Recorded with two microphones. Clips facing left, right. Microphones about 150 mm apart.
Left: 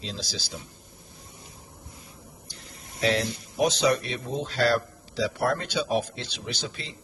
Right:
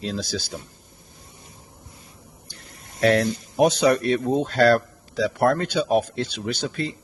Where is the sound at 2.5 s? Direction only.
60° right (ahead or behind).